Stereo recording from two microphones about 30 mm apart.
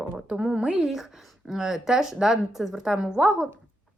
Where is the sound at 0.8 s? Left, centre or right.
Centre.